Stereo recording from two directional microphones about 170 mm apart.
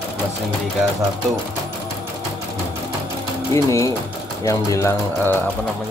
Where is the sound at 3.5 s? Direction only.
15° left (ahead or behind).